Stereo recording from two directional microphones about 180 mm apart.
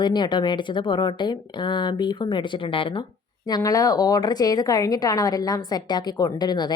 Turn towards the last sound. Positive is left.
turn(degrees=25)  # may be behind; listen again after turning